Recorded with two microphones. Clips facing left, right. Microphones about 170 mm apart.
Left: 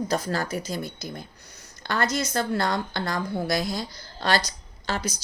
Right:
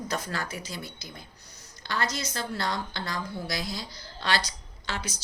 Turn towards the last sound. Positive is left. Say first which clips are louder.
# left 6 dB
turn(degrees=40)  # may be behind; listen again after turning